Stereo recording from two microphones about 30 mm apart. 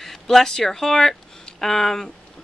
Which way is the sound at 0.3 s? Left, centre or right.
Centre.